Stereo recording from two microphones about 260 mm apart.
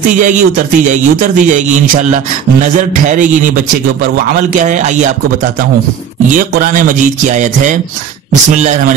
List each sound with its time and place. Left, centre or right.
0.2 s speech: right
2.7 s speech: right
6.3 s speech: right